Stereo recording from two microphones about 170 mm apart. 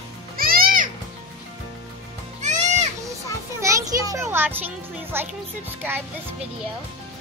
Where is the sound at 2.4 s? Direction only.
45° right (ahead or behind).